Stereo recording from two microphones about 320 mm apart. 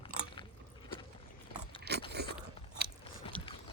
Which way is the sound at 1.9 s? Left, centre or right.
Right.